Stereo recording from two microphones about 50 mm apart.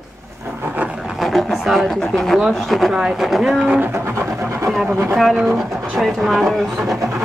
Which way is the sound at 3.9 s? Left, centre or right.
Right.